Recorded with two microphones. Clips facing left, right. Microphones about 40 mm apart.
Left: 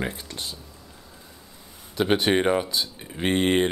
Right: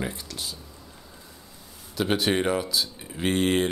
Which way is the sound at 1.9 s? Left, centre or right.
Centre.